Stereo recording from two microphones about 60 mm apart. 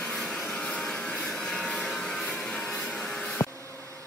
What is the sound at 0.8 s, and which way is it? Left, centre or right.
Vehicle, centre.